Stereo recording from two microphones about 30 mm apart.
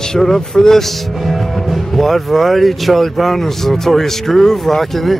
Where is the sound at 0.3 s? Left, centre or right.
Centre.